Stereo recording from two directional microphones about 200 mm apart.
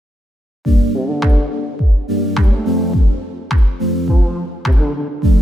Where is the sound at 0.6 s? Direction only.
Centre (ahead or behind).